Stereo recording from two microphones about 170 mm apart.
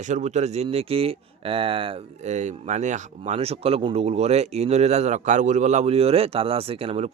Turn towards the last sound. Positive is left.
turn(degrees=-35)  # may be behind; listen again after turning